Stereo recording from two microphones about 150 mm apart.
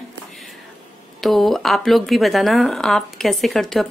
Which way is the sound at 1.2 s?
Centre (ahead or behind).